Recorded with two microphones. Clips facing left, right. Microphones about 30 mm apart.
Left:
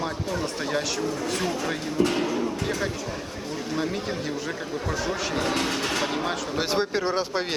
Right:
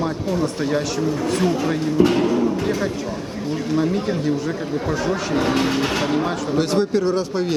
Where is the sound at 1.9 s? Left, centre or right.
Centre.